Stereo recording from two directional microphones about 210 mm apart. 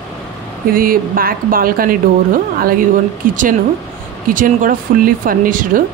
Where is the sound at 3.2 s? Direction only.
40° right (ahead or behind).